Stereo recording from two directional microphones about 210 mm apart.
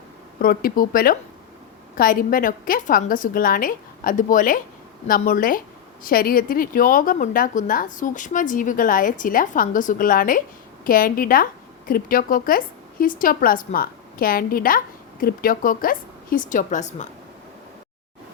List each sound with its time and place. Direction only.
0.3 s a woman's voice: 45° left (ahead or behind)